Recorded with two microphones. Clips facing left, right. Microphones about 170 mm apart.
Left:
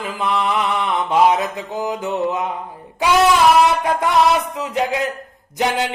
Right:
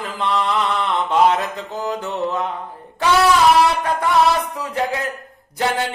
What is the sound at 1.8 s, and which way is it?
Mantra, 15° left (ahead or behind).